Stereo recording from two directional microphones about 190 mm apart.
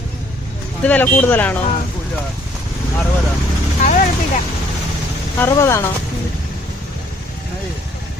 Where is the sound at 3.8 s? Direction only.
40° left (ahead or behind).